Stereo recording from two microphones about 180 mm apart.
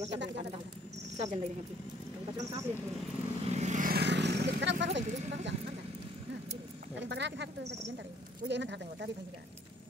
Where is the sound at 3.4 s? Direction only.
40° right (ahead or behind).